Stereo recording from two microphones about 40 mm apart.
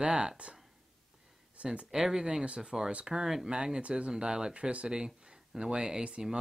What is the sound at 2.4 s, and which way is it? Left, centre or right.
Speech, right.